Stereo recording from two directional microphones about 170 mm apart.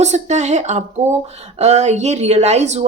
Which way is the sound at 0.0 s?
40° right (ahead or behind).